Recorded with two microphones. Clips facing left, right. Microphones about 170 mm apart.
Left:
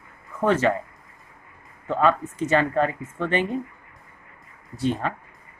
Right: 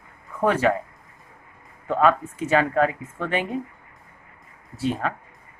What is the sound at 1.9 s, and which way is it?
Speech, 10° right (ahead or behind).